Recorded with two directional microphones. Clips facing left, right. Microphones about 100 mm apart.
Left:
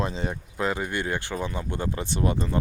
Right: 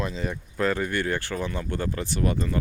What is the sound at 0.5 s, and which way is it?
Speech, 15° left (ahead or behind).